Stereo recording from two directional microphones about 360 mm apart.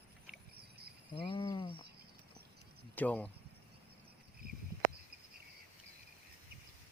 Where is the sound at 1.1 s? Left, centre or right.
Centre.